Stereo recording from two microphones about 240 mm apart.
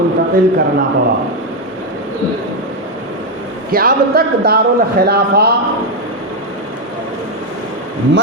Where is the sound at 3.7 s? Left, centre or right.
Right.